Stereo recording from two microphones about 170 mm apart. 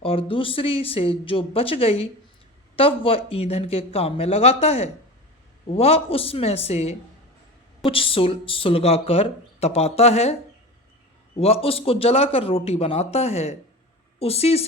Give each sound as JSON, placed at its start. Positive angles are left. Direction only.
{"t": 0.0, "sound": "speech", "side_deg": 30}
{"t": 11.3, "sound": "speech", "side_deg": 35}